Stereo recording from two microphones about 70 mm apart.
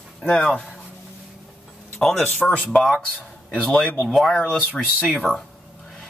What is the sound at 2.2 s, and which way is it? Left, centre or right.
Speech, centre.